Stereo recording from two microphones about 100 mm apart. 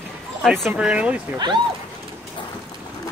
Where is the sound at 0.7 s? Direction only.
10° right (ahead or behind).